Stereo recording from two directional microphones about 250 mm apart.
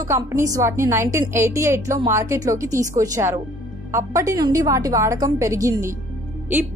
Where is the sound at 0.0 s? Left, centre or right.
Centre.